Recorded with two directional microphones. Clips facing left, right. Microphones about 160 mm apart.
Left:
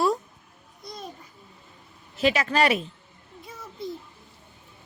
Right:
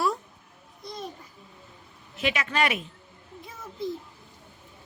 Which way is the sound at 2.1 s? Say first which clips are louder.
Left 5 dB; 35° left (ahead or behind).